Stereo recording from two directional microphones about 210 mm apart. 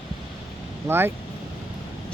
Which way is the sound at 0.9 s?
10° right (ahead or behind).